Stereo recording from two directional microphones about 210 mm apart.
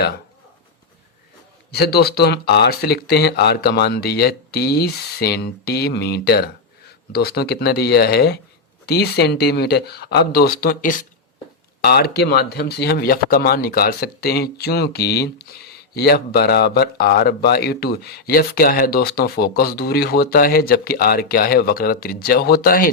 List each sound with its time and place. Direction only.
1.7 s speech: 50° left (ahead or behind)